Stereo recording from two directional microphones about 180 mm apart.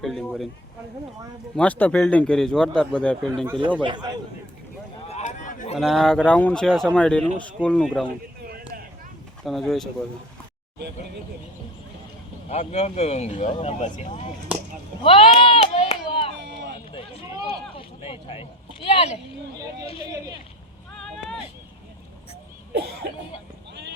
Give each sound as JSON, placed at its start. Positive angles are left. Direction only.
{"t": 0.0, "sound": "speech", "side_deg": 0}
{"t": 1.5, "sound": "speech", "side_deg": 5}
{"t": 3.8, "sound": "a man's voice", "side_deg": -25}
{"t": 5.0, "sound": "a sound", "side_deg": 40}
{"t": 5.7, "sound": "speech", "side_deg": 0}
{"t": 8.4, "sound": "a sound", "side_deg": -55}
{"t": 9.4, "sound": "speech", "side_deg": 0}
{"t": 12.5, "sound": "speech", "side_deg": 35}
{"t": 15.0, "sound": "a sound", "side_deg": 30}
{"t": 23.0, "sound": "speech", "side_deg": -65}